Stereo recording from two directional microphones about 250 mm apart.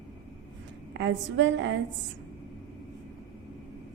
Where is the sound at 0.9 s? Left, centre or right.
Right.